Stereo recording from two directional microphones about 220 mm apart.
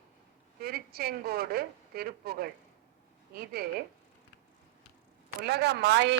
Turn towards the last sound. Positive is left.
turn(degrees=-50)  # may be behind; listen again after turning